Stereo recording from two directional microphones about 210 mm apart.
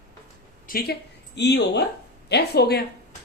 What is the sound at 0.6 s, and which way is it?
Speech, 45° left (ahead or behind).